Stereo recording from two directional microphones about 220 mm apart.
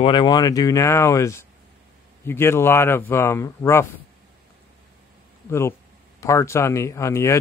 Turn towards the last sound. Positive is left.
turn(degrees=15)  # may be behind; listen again after turning